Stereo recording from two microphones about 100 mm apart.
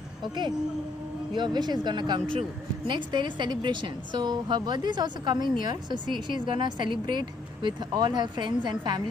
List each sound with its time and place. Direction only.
0.2 s a woman's voice: 50° right (ahead or behind)